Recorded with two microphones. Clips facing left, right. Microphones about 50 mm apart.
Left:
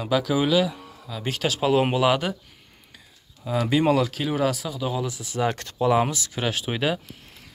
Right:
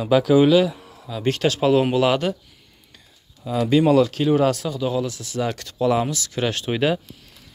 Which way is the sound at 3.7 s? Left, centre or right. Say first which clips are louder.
Right 5 dB; centre.